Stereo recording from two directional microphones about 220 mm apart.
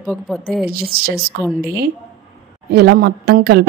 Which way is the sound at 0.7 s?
45° right (ahead or behind).